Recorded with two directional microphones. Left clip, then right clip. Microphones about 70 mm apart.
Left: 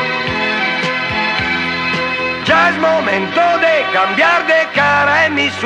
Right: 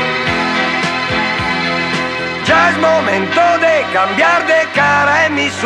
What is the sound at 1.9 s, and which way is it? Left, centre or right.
Music, right.